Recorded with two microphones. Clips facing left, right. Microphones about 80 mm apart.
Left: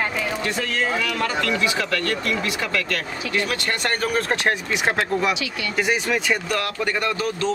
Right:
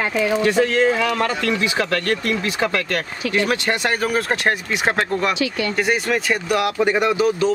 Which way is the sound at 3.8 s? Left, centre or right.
Centre.